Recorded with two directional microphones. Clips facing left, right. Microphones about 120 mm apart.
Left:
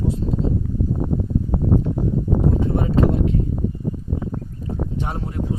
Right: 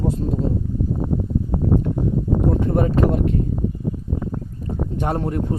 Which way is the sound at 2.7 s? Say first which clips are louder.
Right 1 dB; 55° right (ahead or behind).